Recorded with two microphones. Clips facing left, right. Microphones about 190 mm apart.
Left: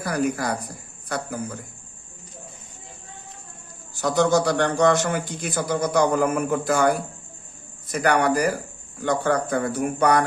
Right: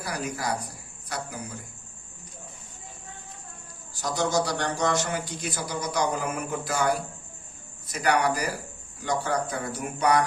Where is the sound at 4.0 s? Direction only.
60° left (ahead or behind).